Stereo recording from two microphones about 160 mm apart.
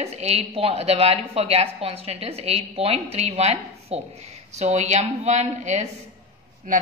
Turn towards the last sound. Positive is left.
turn(degrees=-55)  # may be behind; listen again after turning